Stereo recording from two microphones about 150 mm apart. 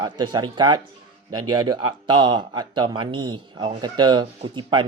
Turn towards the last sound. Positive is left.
turn(degrees=-30)  # may be behind; listen again after turning